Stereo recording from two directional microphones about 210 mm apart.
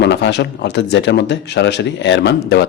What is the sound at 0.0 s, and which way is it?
Speech, 55° left (ahead or behind).